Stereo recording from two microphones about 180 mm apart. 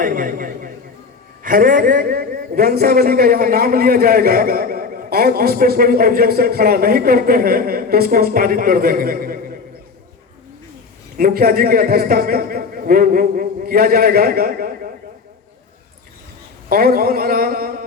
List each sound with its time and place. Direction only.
0.0 s a man's voice: 50° right (ahead or behind)
11.2 s a man's voice: 55° right (ahead or behind)
16.6 s a man's voice: 55° right (ahead or behind)